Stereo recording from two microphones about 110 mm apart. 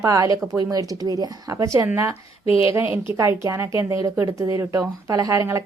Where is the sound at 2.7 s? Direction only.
20° right (ahead or behind).